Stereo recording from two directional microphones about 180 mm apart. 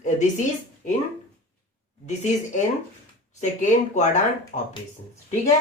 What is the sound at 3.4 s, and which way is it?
Speech, 40° left (ahead or behind).